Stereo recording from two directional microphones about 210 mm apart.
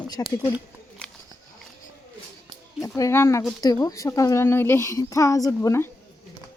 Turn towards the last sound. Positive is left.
turn(degrees=15)  # may be behind; listen again after turning